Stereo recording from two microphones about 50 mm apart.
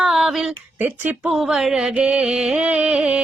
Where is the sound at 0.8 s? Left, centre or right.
Right.